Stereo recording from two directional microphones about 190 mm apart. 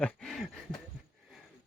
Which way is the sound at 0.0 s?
5° left (ahead or behind).